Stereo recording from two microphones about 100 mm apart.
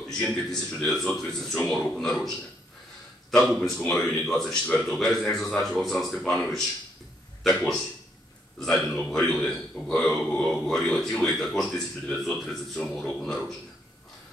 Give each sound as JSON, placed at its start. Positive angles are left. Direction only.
{"t": 0.2, "sound": "a man's voice", "side_deg": 5}
{"t": 9.1, "sound": "a man's voice", "side_deg": 5}